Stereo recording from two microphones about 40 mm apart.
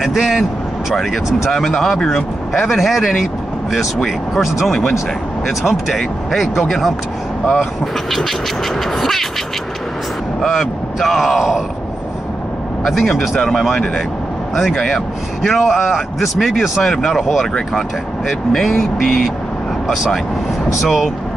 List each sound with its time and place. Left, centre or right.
0.0 s vehicle: centre
1.7 s speech: centre
4.6 s speech: centre
5.5 s speech: centre
7.4 s speech: centre
10.4 s speech: centre
13.1 s speech: centre
15.5 s speech: centre
18.5 s speech: centre
20.8 s speech: centre